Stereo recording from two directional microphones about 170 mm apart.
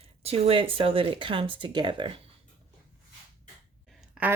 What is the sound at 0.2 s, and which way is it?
Speech, 35° right (ahead or behind).